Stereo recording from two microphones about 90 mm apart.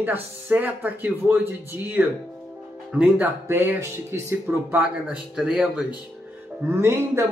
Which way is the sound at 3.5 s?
25° right (ahead or behind).